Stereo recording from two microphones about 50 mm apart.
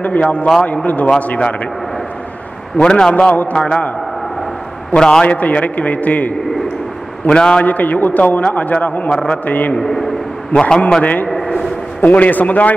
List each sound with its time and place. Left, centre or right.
0.0 s a man's voice: left
2.8 s a man's voice: centre
4.9 s a man's voice: centre
5.3 s a man's voice: left
7.2 s a man's voice: centre
7.6 s a man's voice: left
9.1 s a man's voice: centre
9.5 s a man's voice: left
9.8 s a man's voice: centre
10.5 s a man's voice: centre
12.0 s a man's voice: left